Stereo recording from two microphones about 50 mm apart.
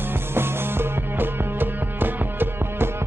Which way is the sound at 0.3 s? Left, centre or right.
Right.